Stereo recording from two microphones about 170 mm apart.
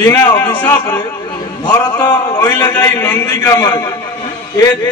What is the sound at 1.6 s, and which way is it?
A man's voice, 20° left (ahead or behind).